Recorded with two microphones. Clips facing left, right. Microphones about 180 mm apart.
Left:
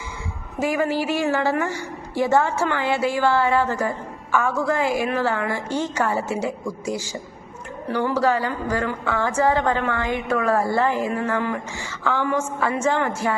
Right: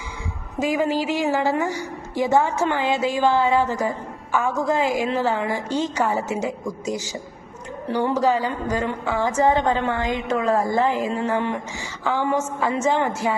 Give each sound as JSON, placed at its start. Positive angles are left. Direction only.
{"t": 0.6, "sound": "a woman's voice", "side_deg": -15}